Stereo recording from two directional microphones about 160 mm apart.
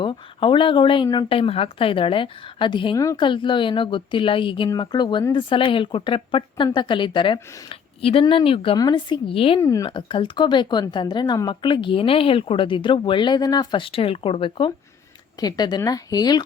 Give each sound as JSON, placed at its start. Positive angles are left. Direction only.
{"t": 0.0, "sound": "speech", "side_deg": 30}
{"t": 9.6, "sound": "speech", "side_deg": 20}